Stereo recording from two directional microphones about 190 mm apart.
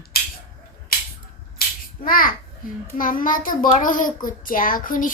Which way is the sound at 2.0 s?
50° left (ahead or behind).